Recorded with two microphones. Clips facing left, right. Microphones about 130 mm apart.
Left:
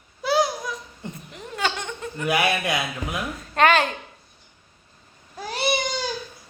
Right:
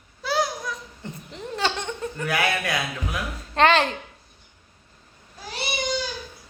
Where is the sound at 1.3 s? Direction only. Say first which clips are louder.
Right 1 dB; 30° right (ahead or behind).